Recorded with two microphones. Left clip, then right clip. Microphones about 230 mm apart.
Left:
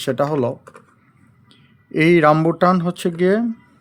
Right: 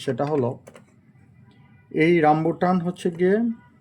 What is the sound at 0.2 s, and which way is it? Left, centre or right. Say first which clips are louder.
Speech: left 6 dB; left.